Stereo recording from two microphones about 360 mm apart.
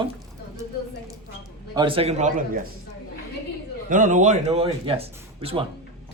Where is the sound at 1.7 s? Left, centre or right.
Centre.